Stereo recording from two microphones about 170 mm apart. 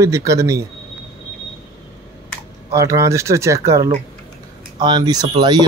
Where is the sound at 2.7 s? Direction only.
20° right (ahead or behind).